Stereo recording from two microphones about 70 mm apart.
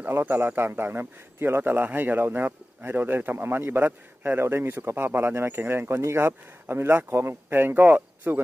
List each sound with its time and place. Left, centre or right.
0.1 s a man's voice: right